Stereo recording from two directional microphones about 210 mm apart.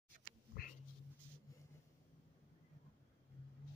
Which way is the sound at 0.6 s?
45° left (ahead or behind).